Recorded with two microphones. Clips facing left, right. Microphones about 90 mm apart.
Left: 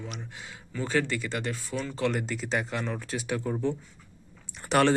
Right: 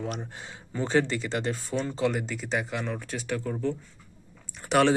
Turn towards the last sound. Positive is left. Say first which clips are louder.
# right 1 dB
turn(degrees=0)  # may be behind; listen again after turning